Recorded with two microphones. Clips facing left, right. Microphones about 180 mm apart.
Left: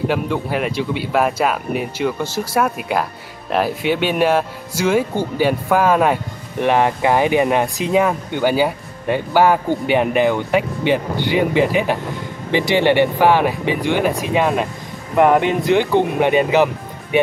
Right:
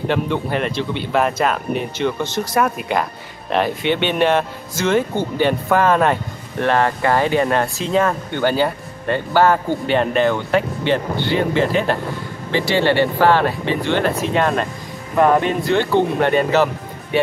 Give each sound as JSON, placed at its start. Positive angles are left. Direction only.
{"t": 0.1, "sound": "speech", "side_deg": 5}